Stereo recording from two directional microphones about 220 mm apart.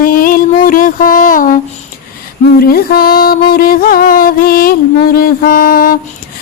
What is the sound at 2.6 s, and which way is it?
A woman's voice, 45° left (ahead or behind).